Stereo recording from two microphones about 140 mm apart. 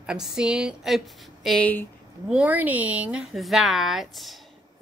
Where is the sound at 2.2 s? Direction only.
10° right (ahead or behind).